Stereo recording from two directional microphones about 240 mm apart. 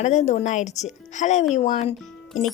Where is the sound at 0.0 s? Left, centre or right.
Left.